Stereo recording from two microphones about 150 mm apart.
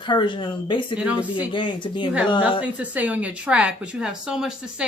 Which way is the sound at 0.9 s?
10° right (ahead or behind).